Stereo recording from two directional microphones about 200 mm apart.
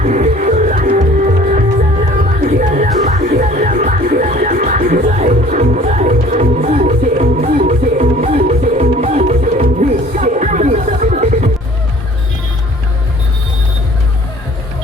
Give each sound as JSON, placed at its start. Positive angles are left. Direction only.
{"t": 0.0, "sound": "music", "side_deg": -35}